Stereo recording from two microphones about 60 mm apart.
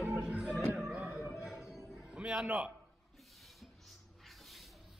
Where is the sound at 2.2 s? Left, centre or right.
Centre.